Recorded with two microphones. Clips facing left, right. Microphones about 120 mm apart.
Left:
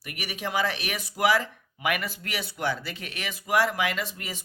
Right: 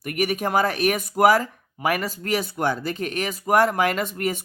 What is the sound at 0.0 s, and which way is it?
Speech, 50° right (ahead or behind).